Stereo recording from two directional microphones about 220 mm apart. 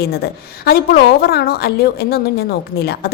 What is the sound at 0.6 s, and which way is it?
A woman's voice, 45° left (ahead or behind).